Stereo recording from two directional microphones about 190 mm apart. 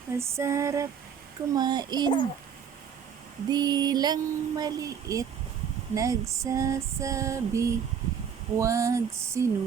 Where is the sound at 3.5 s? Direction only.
20° right (ahead or behind).